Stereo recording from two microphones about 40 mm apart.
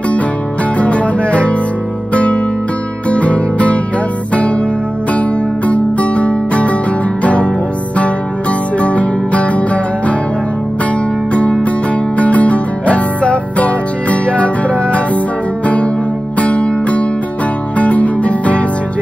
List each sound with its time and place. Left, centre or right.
0.7 s music: left
3.1 s guitar: left
7.2 s music: left
11.6 s music: left
15.6 s guitar: left
16.3 s music: left